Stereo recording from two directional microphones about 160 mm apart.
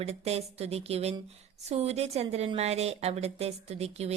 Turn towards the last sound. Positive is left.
turn(degrees=-40)  # may be behind; listen again after turning